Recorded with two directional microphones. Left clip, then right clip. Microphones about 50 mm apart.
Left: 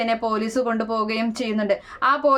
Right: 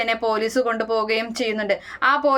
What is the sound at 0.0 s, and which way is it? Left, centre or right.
Speech, left.